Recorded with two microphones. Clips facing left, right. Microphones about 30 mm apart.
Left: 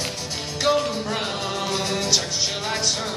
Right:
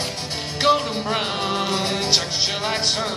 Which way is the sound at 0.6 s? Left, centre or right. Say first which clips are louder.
Right 2 dB; right.